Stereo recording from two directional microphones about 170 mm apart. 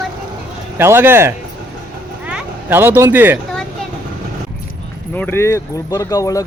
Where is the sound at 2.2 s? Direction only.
10° right (ahead or behind).